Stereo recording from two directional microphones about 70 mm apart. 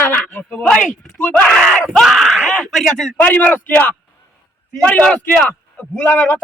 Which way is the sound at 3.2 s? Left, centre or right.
Left.